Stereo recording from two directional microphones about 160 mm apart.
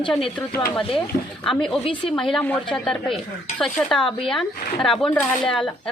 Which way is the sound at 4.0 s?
35° left (ahead or behind).